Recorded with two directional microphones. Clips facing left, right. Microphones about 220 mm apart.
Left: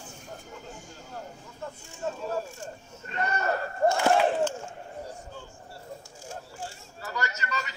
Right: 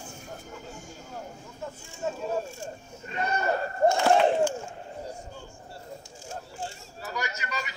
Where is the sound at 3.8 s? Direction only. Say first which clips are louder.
Right 2 dB; 20° right (ahead or behind).